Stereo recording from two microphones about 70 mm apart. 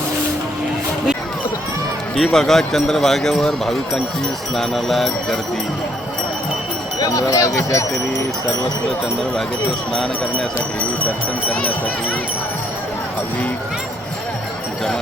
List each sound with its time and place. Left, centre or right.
2.1 s speech: centre
7.0 s speech: left